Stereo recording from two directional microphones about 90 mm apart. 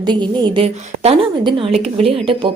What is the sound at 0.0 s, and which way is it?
Speech, 55° right (ahead or behind).